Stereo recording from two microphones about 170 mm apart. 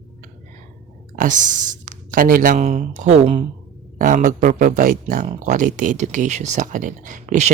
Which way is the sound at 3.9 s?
50° right (ahead or behind).